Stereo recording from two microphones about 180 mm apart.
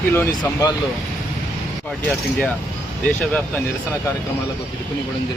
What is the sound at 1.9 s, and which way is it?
Speech, 5° left (ahead or behind).